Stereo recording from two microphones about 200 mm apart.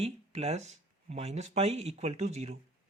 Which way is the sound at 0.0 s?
30° right (ahead or behind).